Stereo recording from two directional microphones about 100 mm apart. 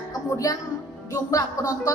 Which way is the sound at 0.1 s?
40° left (ahead or behind).